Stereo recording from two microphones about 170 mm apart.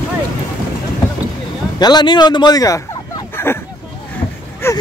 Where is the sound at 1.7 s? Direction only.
25° left (ahead or behind).